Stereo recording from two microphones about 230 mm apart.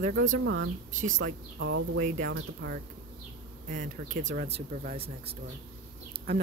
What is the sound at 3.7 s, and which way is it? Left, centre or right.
Speech, right.